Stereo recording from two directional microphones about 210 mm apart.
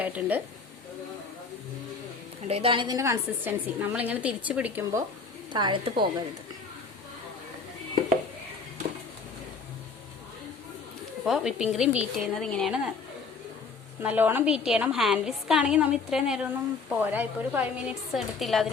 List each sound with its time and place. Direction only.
0.0 s a woman's voice: 5° right (ahead or behind)
2.5 s a woman's voice: 25° right (ahead or behind); by 5.0 s 10° right (ahead or behind)
5.5 s a woman's voice: 20° right (ahead or behind)
11.3 s a woman's voice: 5° right (ahead or behind)
14.0 s a woman's voice: 10° right (ahead or behind)